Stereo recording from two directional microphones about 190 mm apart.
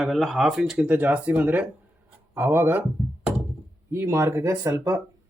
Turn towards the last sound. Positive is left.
turn(degrees=-15)  # may be behind; listen again after turning